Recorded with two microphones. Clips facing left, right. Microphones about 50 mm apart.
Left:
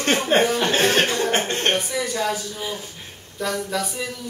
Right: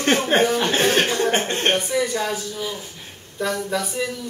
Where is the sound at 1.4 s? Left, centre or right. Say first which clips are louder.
Right 1 dB; centre.